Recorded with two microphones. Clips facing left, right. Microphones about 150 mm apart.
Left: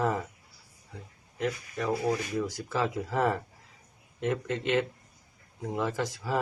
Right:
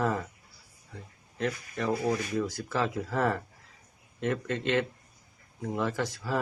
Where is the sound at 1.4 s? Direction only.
15° left (ahead or behind).